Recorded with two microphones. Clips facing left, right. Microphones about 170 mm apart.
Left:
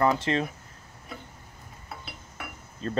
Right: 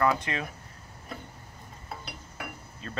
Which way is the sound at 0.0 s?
25° left (ahead or behind).